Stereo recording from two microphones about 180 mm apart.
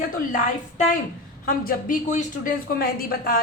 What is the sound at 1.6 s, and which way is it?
A woman's voice, 50° left (ahead or behind).